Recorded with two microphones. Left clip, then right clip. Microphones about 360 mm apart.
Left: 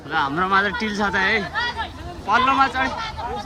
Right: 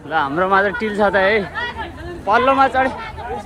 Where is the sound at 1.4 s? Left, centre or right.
Left.